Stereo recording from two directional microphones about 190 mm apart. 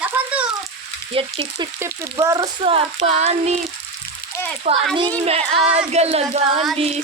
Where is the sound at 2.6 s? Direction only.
30° right (ahead or behind).